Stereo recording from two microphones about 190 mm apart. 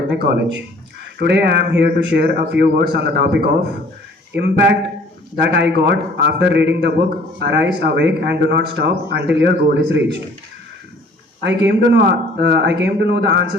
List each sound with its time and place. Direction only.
0.1 s a man's voice: 70° right (ahead or behind)
11.4 s a man's voice: 65° right (ahead or behind)